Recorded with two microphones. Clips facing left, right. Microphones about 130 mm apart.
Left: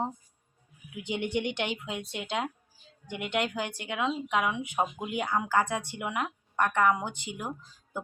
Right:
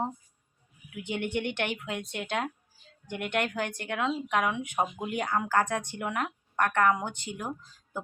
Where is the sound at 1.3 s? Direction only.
15° left (ahead or behind).